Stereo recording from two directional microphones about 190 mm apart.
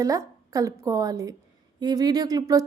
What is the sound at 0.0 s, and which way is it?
A woman's voice, 15° right (ahead or behind).